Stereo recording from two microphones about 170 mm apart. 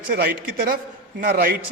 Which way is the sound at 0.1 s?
60° right (ahead or behind).